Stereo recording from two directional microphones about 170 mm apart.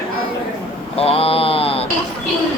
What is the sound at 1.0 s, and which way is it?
Mantra, 35° left (ahead or behind).